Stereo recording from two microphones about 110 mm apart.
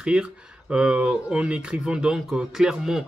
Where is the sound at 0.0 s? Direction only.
10° right (ahead or behind).